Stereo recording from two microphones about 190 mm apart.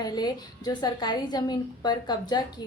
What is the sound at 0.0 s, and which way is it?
A woman's voice, 20° left (ahead or behind).